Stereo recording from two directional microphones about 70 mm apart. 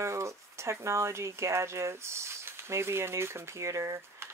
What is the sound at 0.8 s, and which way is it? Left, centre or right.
Speech, right.